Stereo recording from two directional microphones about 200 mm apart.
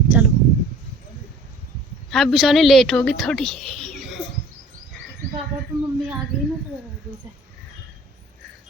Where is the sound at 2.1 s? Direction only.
Centre (ahead or behind).